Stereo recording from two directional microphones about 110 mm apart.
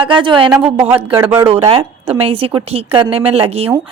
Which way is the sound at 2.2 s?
55° right (ahead or behind).